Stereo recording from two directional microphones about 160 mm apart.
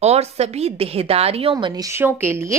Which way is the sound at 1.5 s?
25° right (ahead or behind).